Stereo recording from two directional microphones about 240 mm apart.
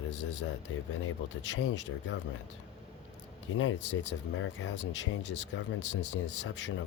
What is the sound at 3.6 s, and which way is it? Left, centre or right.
Speech, left.